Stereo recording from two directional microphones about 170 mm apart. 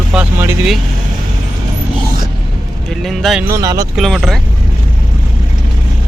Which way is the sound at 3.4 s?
20° right (ahead or behind).